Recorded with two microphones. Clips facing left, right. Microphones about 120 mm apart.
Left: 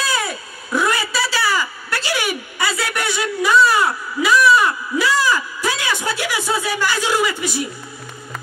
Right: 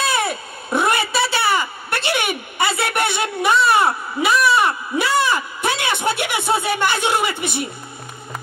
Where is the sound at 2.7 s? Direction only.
60° right (ahead or behind).